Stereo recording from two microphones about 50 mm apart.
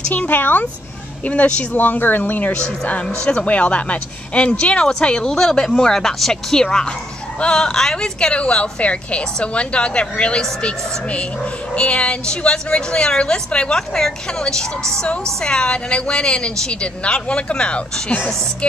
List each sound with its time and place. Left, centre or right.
0.1 s speech: left
2.5 s speech: left
5.3 s speech: centre